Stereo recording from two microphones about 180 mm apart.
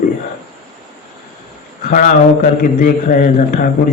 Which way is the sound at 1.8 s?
50° left (ahead or behind).